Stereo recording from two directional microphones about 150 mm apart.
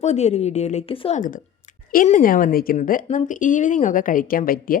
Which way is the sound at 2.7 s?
60° left (ahead or behind).